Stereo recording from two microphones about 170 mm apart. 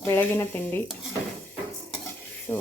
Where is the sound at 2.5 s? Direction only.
15° left (ahead or behind).